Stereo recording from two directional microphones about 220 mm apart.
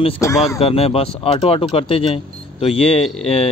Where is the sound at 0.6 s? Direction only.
25° left (ahead or behind).